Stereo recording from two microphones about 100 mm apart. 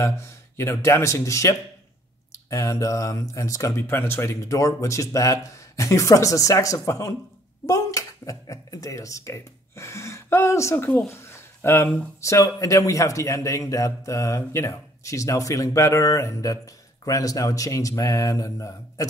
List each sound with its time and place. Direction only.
0.0 s speech: 25° left (ahead or behind)